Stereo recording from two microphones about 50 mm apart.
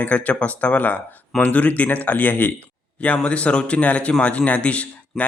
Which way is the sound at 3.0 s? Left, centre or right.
Left.